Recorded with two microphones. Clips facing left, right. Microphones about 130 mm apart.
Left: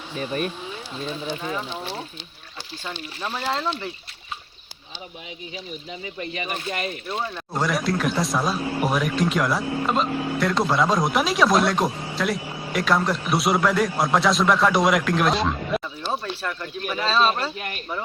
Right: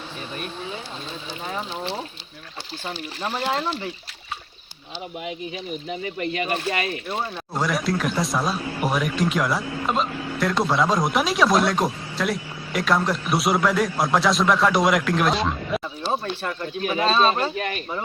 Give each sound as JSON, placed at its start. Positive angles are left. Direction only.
{"t": 3.2, "sound": "speech", "side_deg": -30}
{"t": 6.1, "sound": "speech", "side_deg": -65}
{"t": 7.1, "sound": "a man's voice", "side_deg": 0}
{"t": 16.4, "sound": "speech", "side_deg": -20}